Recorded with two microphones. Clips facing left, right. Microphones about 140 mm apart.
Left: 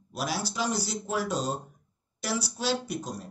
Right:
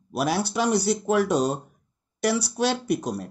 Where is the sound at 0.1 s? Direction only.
65° right (ahead or behind).